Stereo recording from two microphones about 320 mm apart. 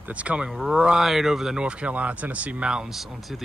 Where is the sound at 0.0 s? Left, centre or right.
Centre.